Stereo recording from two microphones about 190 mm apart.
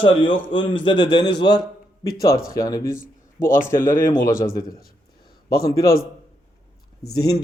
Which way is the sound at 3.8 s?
15° left (ahead or behind).